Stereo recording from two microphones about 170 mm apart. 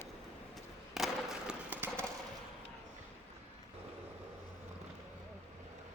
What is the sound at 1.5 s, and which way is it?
Run, 10° right (ahead or behind).